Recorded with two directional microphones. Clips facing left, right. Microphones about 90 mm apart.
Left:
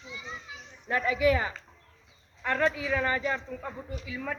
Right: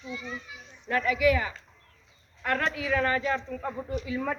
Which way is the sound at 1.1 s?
30° left (ahead or behind).